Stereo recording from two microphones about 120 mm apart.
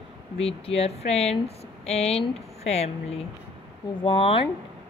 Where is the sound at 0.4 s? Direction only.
55° left (ahead or behind).